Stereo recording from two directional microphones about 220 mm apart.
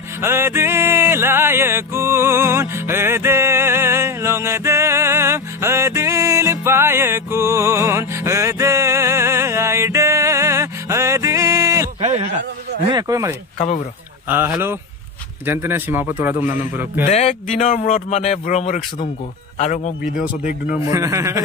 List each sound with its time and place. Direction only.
0.2 s music: 10° right (ahead or behind)
12.0 s a sound: 30° right (ahead or behind)
12.9 s a man's voice: 15° right (ahead or behind)
13.6 s speech: 35° left (ahead or behind)
14.3 s a man's voice: 10° right (ahead or behind)
17.0 s speech: 30° left (ahead or behind)
20.9 s a man's voice: 15° right (ahead or behind)